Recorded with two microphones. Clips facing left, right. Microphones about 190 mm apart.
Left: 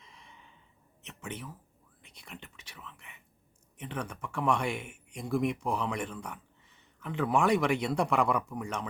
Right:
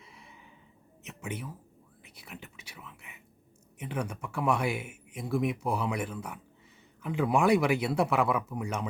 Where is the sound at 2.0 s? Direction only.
5° right (ahead or behind).